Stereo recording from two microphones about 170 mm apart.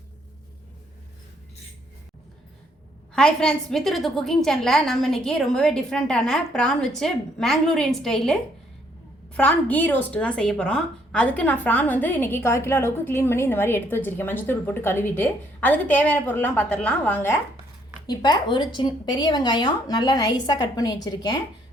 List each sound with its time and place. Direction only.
3.2 s a woman's voice: 5° left (ahead or behind)
18.0 s speech: 25° left (ahead or behind)